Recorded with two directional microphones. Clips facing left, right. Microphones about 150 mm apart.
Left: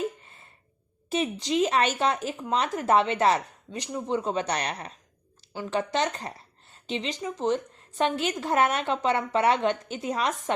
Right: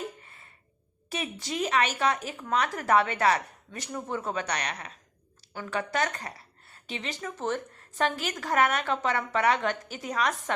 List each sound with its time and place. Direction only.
1.1 s speech: 20° left (ahead or behind)